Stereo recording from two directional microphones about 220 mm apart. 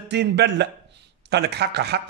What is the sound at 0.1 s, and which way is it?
A man's voice, 50° right (ahead or behind).